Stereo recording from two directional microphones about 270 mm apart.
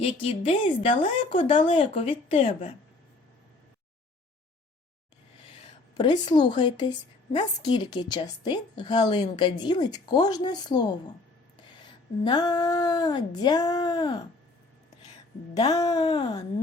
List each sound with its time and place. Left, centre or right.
0.0 s speech: left
6.0 s a woman's voice: centre
12.2 s a woman's voice: centre
15.5 s a woman's voice: centre